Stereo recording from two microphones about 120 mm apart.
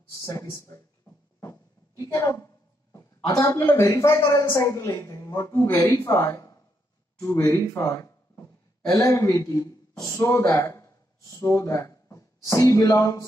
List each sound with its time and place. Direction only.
0.2 s speech: 25° left (ahead or behind)
5.5 s speech: 20° left (ahead or behind)